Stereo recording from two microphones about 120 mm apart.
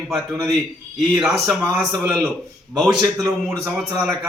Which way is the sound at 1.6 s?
25° right (ahead or behind).